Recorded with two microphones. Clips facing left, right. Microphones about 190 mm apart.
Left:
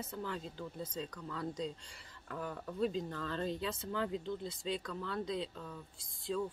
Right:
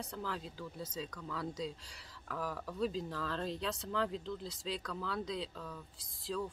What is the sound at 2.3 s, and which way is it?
Speech, 90° right.